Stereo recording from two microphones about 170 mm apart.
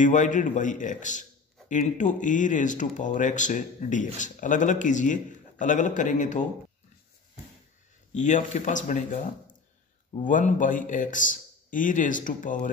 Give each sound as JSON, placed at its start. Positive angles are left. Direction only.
{"t": 0.0, "sound": "speech", "side_deg": 50}
{"t": 8.1, "sound": "speech", "side_deg": 45}